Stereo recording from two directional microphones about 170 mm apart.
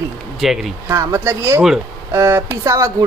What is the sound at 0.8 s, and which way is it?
Speech, 15° right (ahead or behind).